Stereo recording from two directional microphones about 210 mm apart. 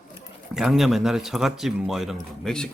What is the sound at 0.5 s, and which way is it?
Speech, centre (ahead or behind).